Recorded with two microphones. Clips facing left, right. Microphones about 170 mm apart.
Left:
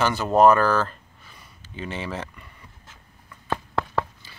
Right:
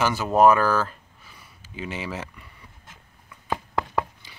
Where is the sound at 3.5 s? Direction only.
10° right (ahead or behind).